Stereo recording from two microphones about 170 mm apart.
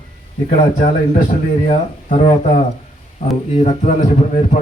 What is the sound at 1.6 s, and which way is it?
Speech, 35° left (ahead or behind).